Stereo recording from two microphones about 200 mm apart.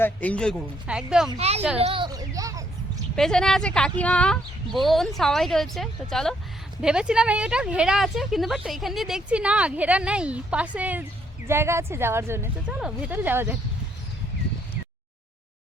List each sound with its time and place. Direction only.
0.0 s speech: 5° left (ahead or behind)
1.4 s a child's voice: 30° right (ahead or behind)
3.2 s speech: 5° left (ahead or behind)